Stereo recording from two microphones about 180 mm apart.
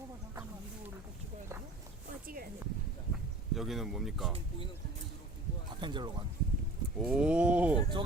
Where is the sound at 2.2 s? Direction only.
50° right (ahead or behind).